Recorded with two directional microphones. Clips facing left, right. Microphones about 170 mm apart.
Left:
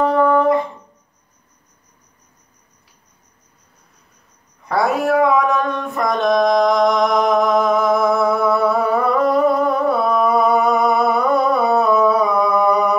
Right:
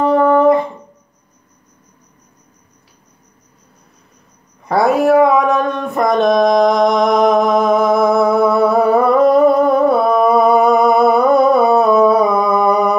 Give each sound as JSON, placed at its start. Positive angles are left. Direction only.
{"t": 0.0, "sound": "dog", "side_deg": -20}
{"t": 4.6, "sound": "speech", "side_deg": -25}
{"t": 6.6, "sound": "a sound", "side_deg": -25}
{"t": 8.1, "sound": "humming", "side_deg": -25}